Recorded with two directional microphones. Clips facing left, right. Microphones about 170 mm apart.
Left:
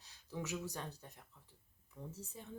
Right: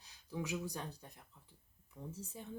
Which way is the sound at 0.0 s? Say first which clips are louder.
Right 2 dB; 15° right (ahead or behind).